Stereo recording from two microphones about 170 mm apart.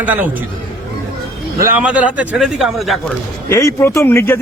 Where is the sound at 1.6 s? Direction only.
15° right (ahead or behind).